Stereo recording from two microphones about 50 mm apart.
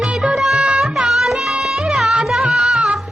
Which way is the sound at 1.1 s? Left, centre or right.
Centre.